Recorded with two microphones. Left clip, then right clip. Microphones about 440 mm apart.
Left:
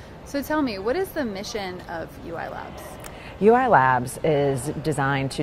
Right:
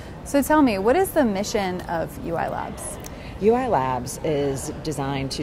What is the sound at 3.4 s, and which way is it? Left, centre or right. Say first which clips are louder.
Speech: left 3 dB; left.